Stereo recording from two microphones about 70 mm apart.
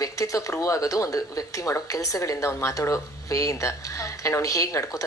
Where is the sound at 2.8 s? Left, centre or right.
Left.